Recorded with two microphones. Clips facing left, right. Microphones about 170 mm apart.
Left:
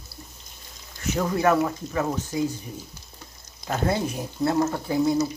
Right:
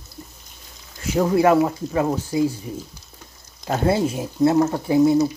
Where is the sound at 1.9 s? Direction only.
25° right (ahead or behind).